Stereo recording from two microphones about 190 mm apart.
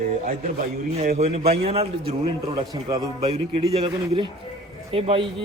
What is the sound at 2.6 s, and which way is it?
Speech, 20° right (ahead or behind).